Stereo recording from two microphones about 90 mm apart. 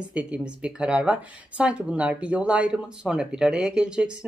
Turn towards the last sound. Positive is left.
turn(degrees=-10)  # may be behind; listen again after turning